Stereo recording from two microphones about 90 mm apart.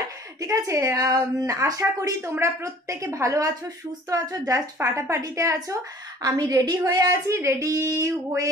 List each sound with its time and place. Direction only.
0.4 s a woman's voice: 40° right (ahead or behind)